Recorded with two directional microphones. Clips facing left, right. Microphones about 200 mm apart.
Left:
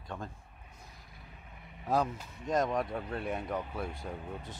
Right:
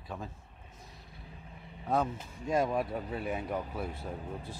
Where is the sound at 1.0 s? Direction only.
30° right (ahead or behind).